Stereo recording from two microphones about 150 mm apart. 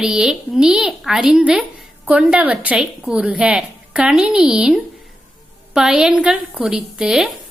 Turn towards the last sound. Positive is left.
turn(degrees=-5)  # may be behind; listen again after turning